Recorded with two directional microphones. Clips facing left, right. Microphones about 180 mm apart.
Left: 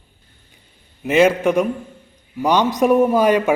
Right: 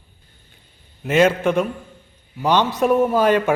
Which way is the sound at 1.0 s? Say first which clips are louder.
Left 2 dB; 10° left (ahead or behind).